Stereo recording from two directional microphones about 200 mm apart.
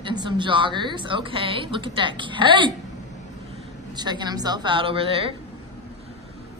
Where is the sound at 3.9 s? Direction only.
20° right (ahead or behind).